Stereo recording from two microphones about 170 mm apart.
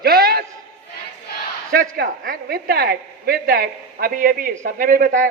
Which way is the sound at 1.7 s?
60° right (ahead or behind).